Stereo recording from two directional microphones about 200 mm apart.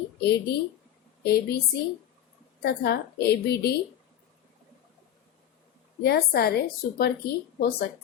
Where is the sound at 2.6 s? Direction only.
50° left (ahead or behind).